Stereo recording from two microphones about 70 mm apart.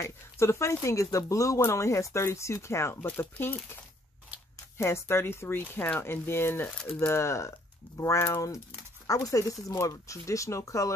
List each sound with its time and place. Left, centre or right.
0.0 s speech: left
4.7 s speech: left
9.0 s speech: left